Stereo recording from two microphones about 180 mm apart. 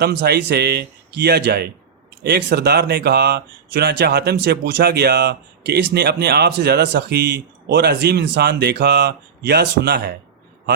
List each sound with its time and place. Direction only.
0.0 s speech: 65° right (ahead or behind)